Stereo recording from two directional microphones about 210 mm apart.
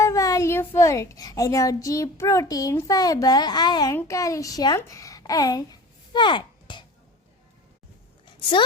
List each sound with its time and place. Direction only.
0.0 s a child's voice: 15° left (ahead or behind)
6.1 s a sound: 20° left (ahead or behind)
8.4 s speech: 25° left (ahead or behind)